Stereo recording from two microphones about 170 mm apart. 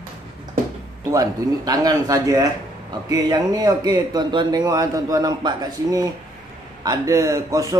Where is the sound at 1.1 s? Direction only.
20° right (ahead or behind).